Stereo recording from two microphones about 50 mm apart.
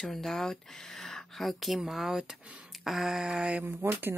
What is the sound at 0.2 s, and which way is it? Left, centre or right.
Speech, centre.